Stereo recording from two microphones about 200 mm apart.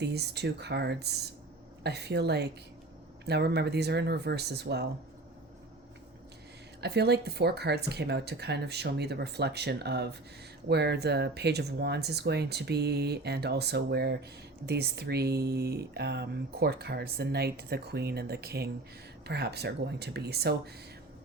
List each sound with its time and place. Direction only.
0.0 s speech: 55° right (ahead or behind)
6.8 s speech: 55° right (ahead or behind)